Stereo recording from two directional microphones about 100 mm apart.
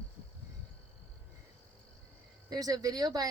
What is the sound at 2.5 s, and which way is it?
Speech, 40° right (ahead or behind).